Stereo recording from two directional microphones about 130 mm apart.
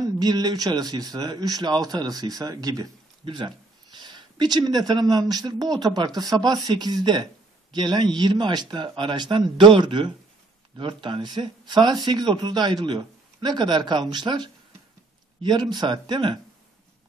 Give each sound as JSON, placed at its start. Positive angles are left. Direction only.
{"t": 0.0, "sound": "speech", "side_deg": -30}